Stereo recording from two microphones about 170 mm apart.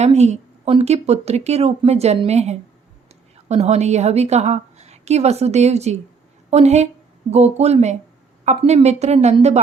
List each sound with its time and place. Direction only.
0.0 s a woman's voice: 40° right (ahead or behind)